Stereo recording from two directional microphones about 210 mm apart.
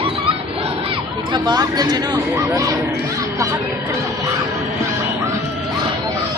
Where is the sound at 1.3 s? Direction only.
20° right (ahead or behind).